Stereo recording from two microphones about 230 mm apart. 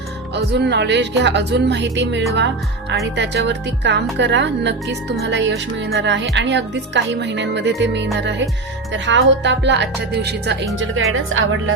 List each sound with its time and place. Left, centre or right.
0.3 s speech: right
10.8 s speech: right